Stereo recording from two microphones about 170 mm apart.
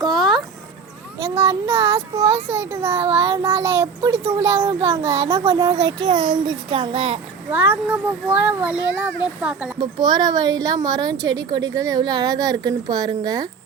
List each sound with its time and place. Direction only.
0.0 s a sound: centre (ahead or behind)
1.4 s a child's voice: 15° right (ahead or behind); by 7.2 s 35° right (ahead or behind)
7.5 s a child's voice: 10° right (ahead or behind)
9.8 s a woman's voice: 25° right (ahead or behind)